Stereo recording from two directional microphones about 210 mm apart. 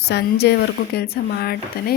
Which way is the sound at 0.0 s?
50° left (ahead or behind).